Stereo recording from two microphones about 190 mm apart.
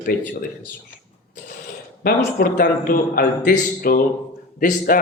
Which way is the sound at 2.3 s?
45° left (ahead or behind).